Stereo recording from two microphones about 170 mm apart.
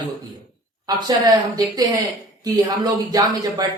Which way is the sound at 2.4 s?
20° right (ahead or behind).